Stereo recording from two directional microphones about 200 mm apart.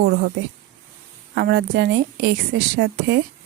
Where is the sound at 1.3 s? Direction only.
55° right (ahead or behind).